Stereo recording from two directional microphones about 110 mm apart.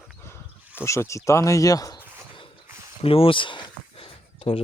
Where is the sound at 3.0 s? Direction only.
60° left (ahead or behind).